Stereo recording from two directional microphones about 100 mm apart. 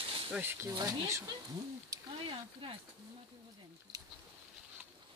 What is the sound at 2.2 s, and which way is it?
Speech, 60° right (ahead or behind).